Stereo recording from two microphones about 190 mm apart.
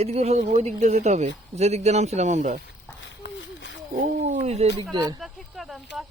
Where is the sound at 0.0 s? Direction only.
35° right (ahead or behind).